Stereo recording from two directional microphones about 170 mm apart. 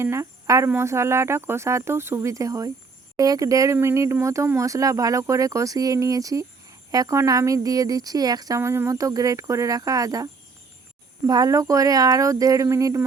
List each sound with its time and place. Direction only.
0.0 s speech: 15° right (ahead or behind)
11.3 s speech: 20° right (ahead or behind)